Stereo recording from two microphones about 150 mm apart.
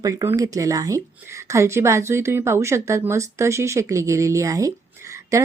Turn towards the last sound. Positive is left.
turn(degrees=-20)  # may be behind; listen again after turning